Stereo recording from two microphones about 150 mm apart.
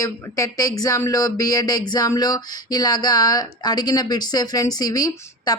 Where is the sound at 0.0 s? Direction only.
20° left (ahead or behind).